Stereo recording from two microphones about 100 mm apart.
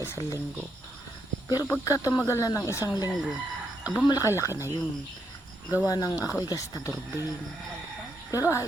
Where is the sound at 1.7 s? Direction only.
35° left (ahead or behind).